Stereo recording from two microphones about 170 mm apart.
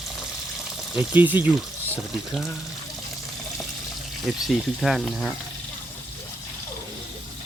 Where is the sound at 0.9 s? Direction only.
10° right (ahead or behind).